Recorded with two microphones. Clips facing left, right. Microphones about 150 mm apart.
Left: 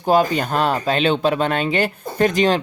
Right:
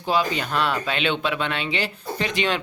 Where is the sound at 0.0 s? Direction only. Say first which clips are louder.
Left 6 dB; 45° left (ahead or behind).